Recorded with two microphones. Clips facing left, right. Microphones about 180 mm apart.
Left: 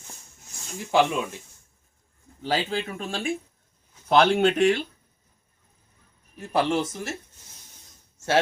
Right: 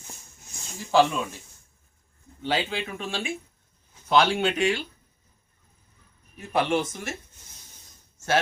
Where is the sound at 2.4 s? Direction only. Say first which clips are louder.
Left 1 dB; 35° left (ahead or behind).